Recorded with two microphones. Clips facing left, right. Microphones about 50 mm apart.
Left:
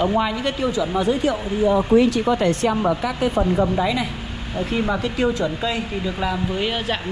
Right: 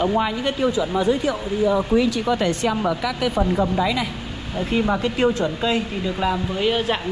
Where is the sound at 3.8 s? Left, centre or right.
Right.